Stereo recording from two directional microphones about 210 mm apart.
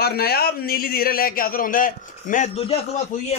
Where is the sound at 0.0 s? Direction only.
45° left (ahead or behind).